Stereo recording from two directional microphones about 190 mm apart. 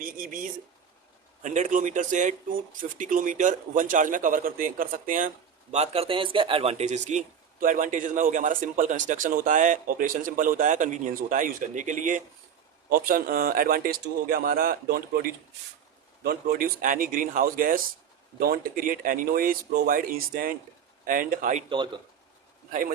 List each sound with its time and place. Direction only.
0.0 s speech: 45° right (ahead or behind)
5.7 s speech: 35° right (ahead or behind)